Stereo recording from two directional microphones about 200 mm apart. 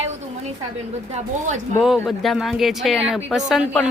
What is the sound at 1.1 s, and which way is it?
Speech, 35° right (ahead or behind).